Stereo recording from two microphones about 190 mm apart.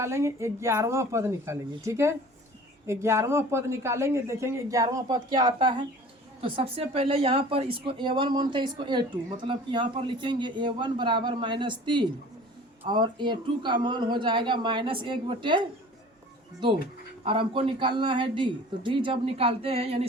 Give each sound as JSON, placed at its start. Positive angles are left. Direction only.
{"t": 0.0, "sound": "a woman's voice", "side_deg": -15}
{"t": 17.2, "sound": "a woman's voice", "side_deg": -25}